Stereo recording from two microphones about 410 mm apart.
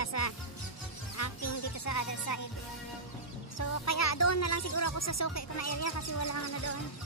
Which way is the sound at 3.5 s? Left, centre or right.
Left.